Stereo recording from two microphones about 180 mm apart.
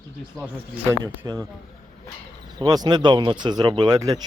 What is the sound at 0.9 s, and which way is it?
Speech, 15° right (ahead or behind).